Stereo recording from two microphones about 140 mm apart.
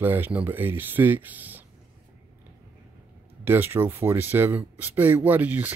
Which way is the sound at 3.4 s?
15° right (ahead or behind).